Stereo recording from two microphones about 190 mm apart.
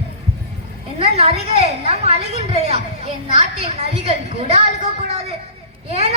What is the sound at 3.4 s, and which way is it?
Speech, 30° right (ahead or behind).